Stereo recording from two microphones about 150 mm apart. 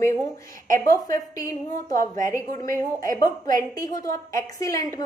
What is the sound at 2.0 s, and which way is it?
A woman's voice, 20° left (ahead or behind).